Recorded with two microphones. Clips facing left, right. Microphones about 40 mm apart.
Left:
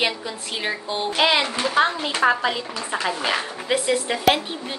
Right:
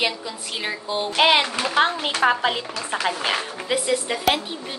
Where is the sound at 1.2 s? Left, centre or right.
Right.